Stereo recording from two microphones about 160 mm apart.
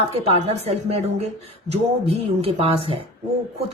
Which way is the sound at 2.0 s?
40° right (ahead or behind).